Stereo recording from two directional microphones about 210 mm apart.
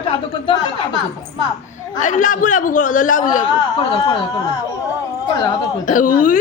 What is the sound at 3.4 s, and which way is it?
A woman's voice, 20° left (ahead or behind).